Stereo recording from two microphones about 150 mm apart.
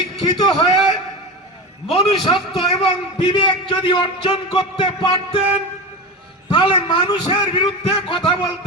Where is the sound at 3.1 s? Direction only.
30° left (ahead or behind).